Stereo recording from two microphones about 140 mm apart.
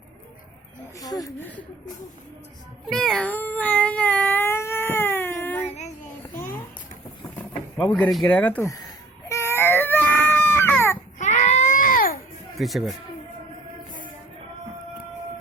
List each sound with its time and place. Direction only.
0.9 s speech: 25° left (ahead or behind)
2.8 s cat: 5° left (ahead or behind)
7.3 s a sound: 10° left (ahead or behind)
8.4 s speech: 10° left (ahead or behind)
8.7 s baby cry: 25° left (ahead or behind)
11.2 s baby cry: 60° left (ahead or behind); by 12.2 s 85° left
12.5 s speech: centre (ahead or behind)